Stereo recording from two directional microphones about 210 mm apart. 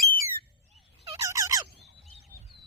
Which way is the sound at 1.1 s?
15° right (ahead or behind).